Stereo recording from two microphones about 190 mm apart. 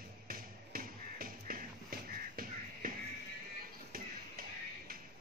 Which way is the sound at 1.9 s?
50° right (ahead or behind).